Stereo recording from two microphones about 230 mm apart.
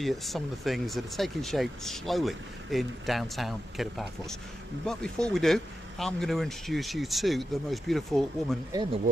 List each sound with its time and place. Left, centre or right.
0.0 s speech: centre
8.7 s speech: centre